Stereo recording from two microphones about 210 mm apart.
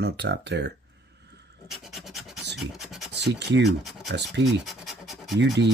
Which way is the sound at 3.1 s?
55° right (ahead or behind).